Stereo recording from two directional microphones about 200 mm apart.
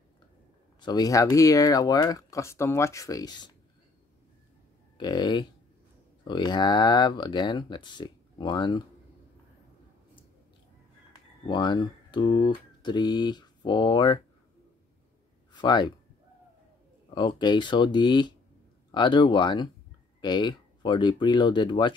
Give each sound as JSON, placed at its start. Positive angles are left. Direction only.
{"t": 0.7, "sound": "speech", "side_deg": 20}
{"t": 4.9, "sound": "speech", "side_deg": 20}
{"t": 11.4, "sound": "speech", "side_deg": 25}
{"t": 15.5, "sound": "speech", "side_deg": 20}
{"t": 17.1, "sound": "speech", "side_deg": 25}